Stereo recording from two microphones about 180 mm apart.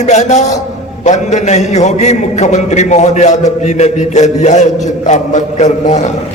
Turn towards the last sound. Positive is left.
turn(degrees=40)  # may be behind; listen again after turning